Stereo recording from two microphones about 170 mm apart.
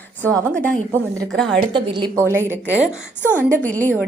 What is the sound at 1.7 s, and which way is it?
Speech, 25° right (ahead or behind).